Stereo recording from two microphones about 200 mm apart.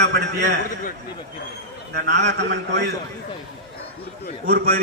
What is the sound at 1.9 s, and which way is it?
A man's voice, 60° right (ahead or behind).